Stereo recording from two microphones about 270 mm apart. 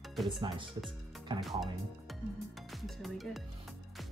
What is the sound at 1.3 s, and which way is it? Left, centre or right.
Speech, centre.